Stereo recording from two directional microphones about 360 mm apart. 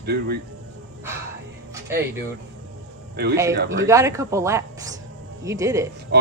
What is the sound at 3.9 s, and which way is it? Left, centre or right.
Speech, centre.